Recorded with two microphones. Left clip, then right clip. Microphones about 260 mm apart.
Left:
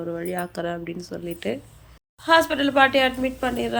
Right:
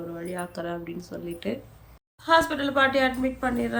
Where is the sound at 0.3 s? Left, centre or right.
Centre.